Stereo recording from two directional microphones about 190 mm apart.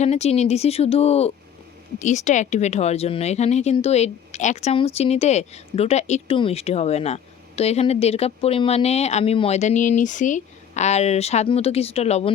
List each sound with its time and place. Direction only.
0.0 s speech: 35° left (ahead or behind)